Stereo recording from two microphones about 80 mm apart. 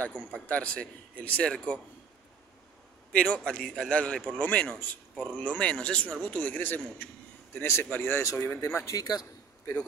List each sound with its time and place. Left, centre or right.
0.0 s a man's voice: centre
3.1 s a man's voice: centre
8.2 s speech: left
8.9 s a man's voice: left